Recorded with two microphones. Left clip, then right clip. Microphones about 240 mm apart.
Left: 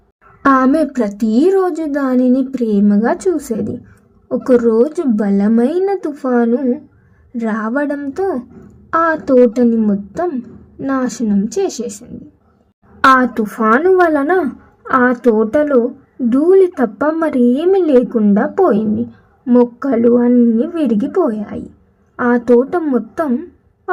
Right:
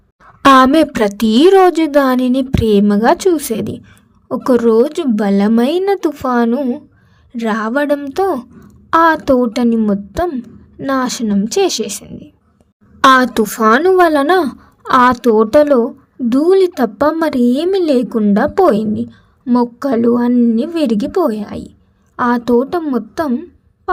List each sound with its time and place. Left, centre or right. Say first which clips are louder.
0.4 s a woman's voice: right 4 dB; right
18.1 s a woman's voice: right 1 dB; right
18.6 s a woman's voice: right 1 dB; right
19.8 s a woman's voice: left 1 dB; right
20.3 s a woman's voice: left 1 dB; right